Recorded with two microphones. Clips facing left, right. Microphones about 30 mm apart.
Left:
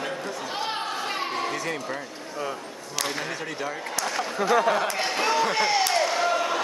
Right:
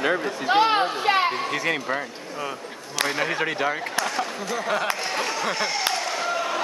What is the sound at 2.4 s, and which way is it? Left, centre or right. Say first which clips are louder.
Speech: even; centre.